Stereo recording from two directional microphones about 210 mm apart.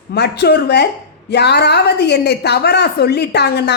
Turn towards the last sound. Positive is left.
turn(degrees=50)  # may be behind; listen again after turning